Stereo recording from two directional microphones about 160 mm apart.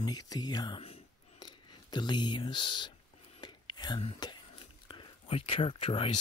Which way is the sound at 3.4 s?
25° left (ahead or behind).